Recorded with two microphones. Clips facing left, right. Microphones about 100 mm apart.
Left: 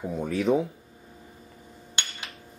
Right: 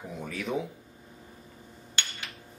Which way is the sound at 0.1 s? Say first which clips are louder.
Left 10 dB; 40° left (ahead or behind).